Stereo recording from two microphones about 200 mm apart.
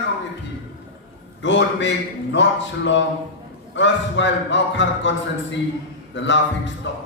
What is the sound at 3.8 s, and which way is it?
A man's voice, 65° left (ahead or behind).